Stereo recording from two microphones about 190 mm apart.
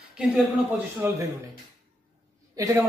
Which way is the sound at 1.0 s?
10° right (ahead or behind).